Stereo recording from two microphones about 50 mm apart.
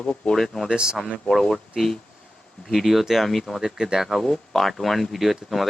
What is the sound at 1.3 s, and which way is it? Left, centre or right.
Speech, centre.